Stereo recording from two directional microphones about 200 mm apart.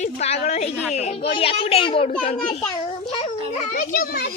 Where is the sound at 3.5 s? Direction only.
45° left (ahead or behind).